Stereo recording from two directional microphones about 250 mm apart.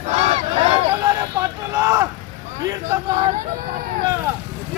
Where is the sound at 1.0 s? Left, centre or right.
Centre.